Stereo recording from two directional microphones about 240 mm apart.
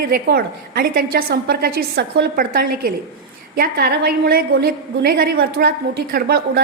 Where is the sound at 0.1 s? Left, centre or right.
Right.